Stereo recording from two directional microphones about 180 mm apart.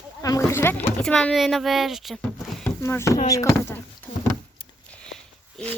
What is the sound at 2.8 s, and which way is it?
Speech, 15° left (ahead or behind).